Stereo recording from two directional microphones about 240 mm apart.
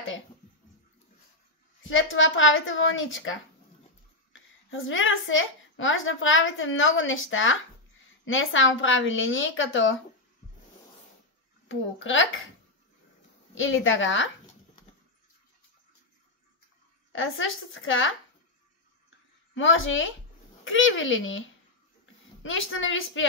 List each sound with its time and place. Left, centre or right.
1.8 s a woman's voice: left
11.7 s a woman's voice: left
13.6 s a woman's voice: left
17.1 s a woman's voice: left
19.5 s a woman's voice: left